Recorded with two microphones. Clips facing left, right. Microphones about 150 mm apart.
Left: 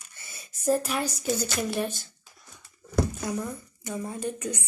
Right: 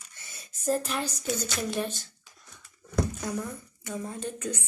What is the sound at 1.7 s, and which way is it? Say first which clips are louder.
Speech: left 2 dB; 10° left (ahead or behind).